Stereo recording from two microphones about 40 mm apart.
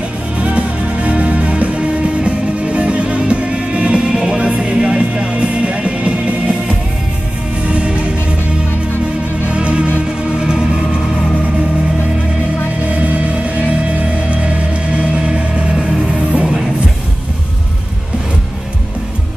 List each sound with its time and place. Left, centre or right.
0.4 s music: right; by 4.4 s centre
4.4 s music: right
9.5 s music: right
12.9 s music: right